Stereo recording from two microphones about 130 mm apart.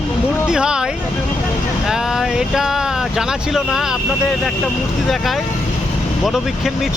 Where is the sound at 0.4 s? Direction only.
5° right (ahead or behind).